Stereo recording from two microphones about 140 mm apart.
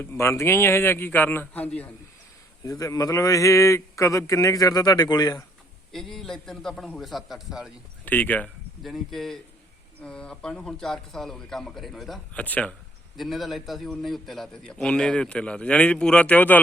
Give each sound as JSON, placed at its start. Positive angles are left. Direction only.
{"t": 0.0, "sound": "a man's voice", "side_deg": 15}
{"t": 2.6, "sound": "a man's voice", "side_deg": 25}
{"t": 5.9, "sound": "a man's voice", "side_deg": 0}
{"t": 8.0, "sound": "a man's voice", "side_deg": 10}
{"t": 8.8, "sound": "a man's voice", "side_deg": 0}
{"t": 13.1, "sound": "a man's voice", "side_deg": 0}